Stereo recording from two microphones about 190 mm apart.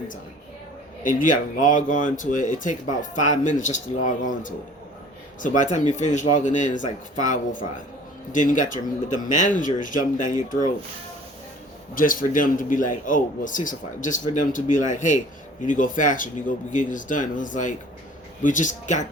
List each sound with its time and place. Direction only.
1.0 s speech: 45° left (ahead or behind)
11.9 s speech: 45° left (ahead or behind)